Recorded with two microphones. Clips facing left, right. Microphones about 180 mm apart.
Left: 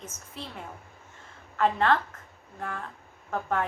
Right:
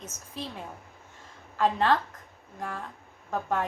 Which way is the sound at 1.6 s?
15° right (ahead or behind).